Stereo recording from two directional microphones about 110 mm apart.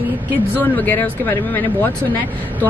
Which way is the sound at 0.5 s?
15° left (ahead or behind).